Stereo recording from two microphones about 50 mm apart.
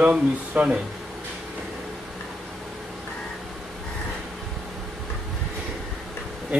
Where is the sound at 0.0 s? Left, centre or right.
Right.